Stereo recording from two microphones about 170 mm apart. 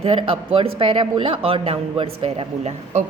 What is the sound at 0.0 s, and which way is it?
A woman's voice, 30° right (ahead or behind).